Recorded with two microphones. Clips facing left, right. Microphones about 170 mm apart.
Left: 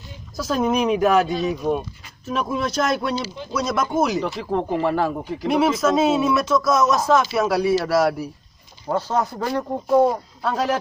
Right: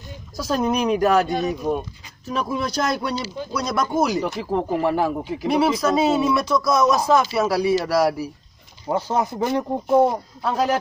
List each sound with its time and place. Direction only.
0.4 s speech: centre (ahead or behind)
4.2 s speech: 10° right (ahead or behind)
5.5 s speech: 5° left (ahead or behind); by 10.1 s 20° right (ahead or behind)
10.4 s speech: 5° right (ahead or behind)